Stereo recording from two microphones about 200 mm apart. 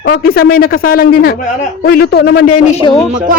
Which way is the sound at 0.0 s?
50° left (ahead or behind).